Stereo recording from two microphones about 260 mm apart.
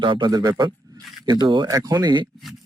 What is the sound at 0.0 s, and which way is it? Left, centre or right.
Speech, centre.